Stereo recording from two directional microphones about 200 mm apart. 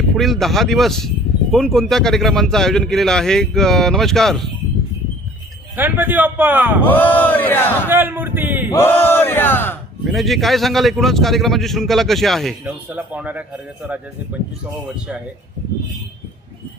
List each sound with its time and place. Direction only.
0.1 s speech: centre (ahead or behind)
5.7 s speech: 10° right (ahead or behind)
6.8 s a sound: 10° left (ahead or behind)
7.9 s a man's voice: 10° right (ahead or behind)
8.7 s a sound: 10° left (ahead or behind)
10.1 s speech: centre (ahead or behind)